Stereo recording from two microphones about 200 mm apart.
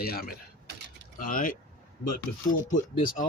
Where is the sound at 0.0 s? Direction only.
50° left (ahead or behind).